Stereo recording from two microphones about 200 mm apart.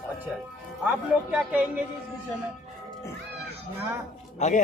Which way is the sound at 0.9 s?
5° right (ahead or behind).